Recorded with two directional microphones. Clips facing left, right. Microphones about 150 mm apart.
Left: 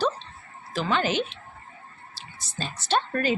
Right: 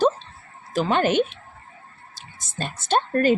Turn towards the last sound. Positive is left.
turn(degrees=-45)  # may be behind; listen again after turning